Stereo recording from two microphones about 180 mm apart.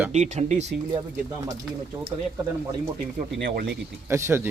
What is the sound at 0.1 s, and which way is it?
Speech, 40° right (ahead or behind).